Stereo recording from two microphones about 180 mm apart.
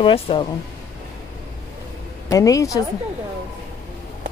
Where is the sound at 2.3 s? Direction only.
20° left (ahead or behind).